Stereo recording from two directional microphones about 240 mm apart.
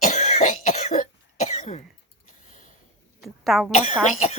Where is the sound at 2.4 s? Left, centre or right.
Left.